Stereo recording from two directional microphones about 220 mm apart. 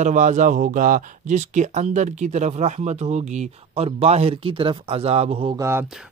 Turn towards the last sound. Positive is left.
turn(degrees=-10)  # may be behind; listen again after turning